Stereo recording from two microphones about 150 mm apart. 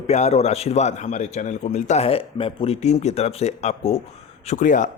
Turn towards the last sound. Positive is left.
turn(degrees=55)  # may be behind; listen again after turning